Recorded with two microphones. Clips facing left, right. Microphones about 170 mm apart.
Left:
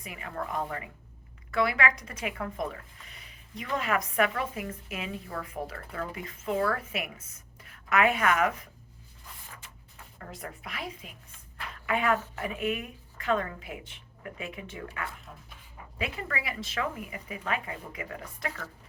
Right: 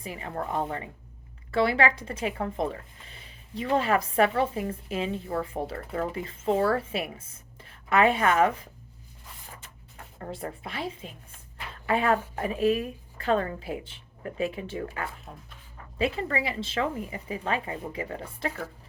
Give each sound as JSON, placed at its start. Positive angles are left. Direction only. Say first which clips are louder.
{"t": 0.0, "sound": "speech", "louder": "right 3 dB", "side_deg": -30}
{"t": 10.2, "sound": "speech", "louder": "right 6 dB", "side_deg": -30}
{"t": 11.5, "sound": "a sound", "louder": "right 4 dB", "side_deg": -30}
{"t": 12.4, "sound": "a woman's voice", "louder": "right 7 dB", "side_deg": -35}